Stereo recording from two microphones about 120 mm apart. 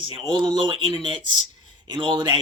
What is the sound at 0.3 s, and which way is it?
A man's voice, 40° right (ahead or behind).